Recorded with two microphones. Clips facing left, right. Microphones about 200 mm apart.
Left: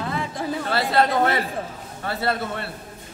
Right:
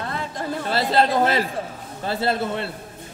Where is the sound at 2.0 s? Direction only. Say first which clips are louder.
Right 2 dB; 25° right (ahead or behind).